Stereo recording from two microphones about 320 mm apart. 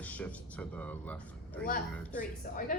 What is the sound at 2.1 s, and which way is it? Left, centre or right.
Speech, left.